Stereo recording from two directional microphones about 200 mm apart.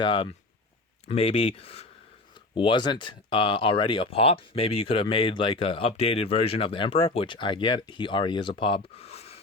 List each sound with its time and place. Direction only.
0.0 s speech: 25° left (ahead or behind)